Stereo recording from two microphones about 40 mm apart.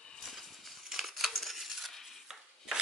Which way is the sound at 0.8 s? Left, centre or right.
Centre.